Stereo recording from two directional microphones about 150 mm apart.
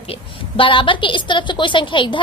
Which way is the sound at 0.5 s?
35° left (ahead or behind).